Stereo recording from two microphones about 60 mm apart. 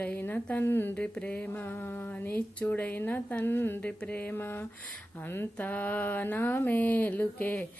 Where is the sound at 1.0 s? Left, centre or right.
Left.